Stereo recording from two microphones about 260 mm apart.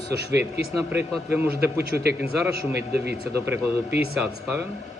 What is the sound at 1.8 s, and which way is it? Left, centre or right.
Speech, right.